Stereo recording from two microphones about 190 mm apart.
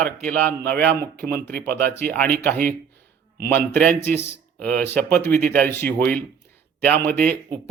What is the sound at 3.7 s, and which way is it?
Speech, 5° left (ahead or behind).